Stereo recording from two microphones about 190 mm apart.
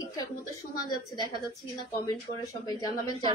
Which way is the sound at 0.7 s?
20° left (ahead or behind).